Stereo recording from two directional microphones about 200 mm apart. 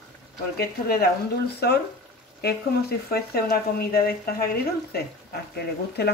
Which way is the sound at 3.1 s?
50° left (ahead or behind).